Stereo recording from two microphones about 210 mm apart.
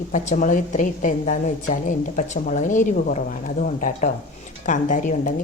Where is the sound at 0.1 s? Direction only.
35° left (ahead or behind).